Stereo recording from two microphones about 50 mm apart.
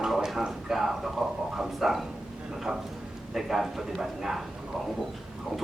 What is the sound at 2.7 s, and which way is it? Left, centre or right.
Speech, centre.